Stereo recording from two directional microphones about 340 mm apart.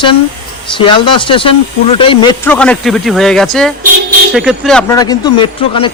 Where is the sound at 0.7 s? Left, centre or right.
Centre.